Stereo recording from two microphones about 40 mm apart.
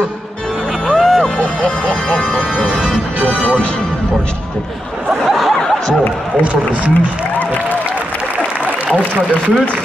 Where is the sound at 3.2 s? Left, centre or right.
Left.